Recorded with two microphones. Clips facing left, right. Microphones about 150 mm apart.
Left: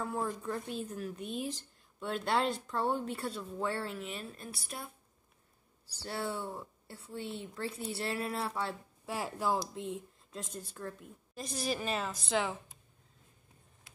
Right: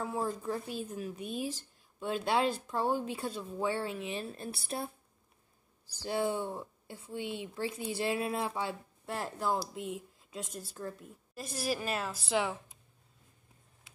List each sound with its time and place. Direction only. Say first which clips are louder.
0.0 s speech: right 1 dB; 5° right (ahead or behind)
4.1 s speech: right 5 dB; 30° right (ahead or behind)
6.0 s speech: right 5 dB; 20° right (ahead or behind)
9.0 s speech: even; 5° left (ahead or behind)
9.6 s speech: even; 5° right (ahead or behind)